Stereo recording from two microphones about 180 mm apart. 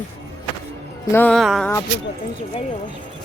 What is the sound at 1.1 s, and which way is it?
Speech, 5° left (ahead or behind).